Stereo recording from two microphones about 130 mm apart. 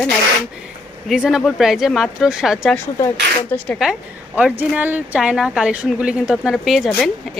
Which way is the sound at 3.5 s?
15° left (ahead or behind).